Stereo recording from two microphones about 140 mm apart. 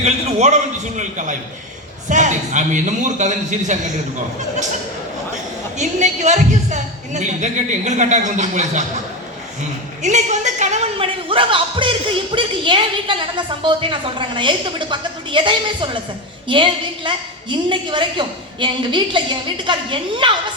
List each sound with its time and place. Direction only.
0.0 s a woman's voice: 50° right (ahead or behind)
5.7 s a woman's voice: 55° right (ahead or behind)
10.0 s a sound: 60° right (ahead or behind)
10.9 s speech: 40° right (ahead or behind)